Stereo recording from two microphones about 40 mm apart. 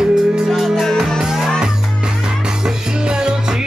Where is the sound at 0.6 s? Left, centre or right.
Centre.